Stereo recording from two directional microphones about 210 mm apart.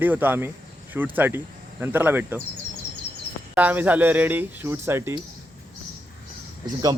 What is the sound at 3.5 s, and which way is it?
Speech, 10° right (ahead or behind).